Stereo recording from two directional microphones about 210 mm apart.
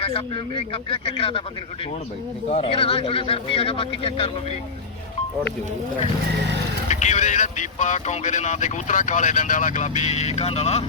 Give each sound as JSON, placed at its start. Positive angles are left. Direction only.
{"t": 0.0, "sound": "speech", "side_deg": 25}
{"t": 2.5, "sound": "speech", "side_deg": 25}
{"t": 6.8, "sound": "speech", "side_deg": 35}